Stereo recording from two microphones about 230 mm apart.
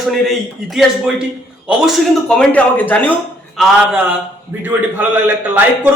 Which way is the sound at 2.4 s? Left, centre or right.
Centre.